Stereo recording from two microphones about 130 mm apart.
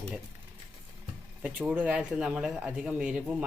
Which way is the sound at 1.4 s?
10° right (ahead or behind).